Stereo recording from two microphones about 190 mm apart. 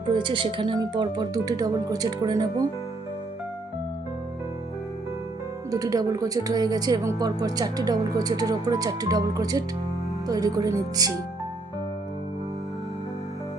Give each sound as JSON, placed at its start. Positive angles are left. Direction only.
{"t": 0.1, "sound": "speech", "side_deg": -25}
{"t": 5.7, "sound": "speech", "side_deg": -20}